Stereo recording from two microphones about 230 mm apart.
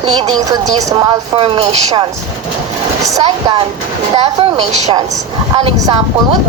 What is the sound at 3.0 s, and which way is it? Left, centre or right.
A woman's voice, centre.